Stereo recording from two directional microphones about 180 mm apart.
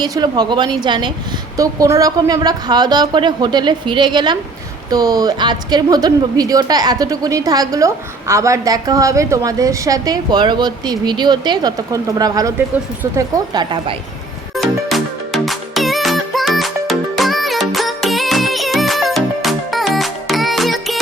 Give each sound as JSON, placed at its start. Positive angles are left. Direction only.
{"t": 0.0, "sound": "a woman's voice", "side_deg": -25}
{"t": 14.5, "sound": "music", "side_deg": 0}